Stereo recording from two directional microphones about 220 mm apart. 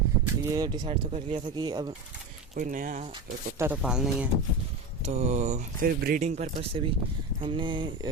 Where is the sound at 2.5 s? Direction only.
35° right (ahead or behind).